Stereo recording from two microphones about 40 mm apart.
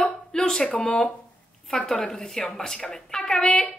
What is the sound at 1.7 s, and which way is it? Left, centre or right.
A woman's voice, centre.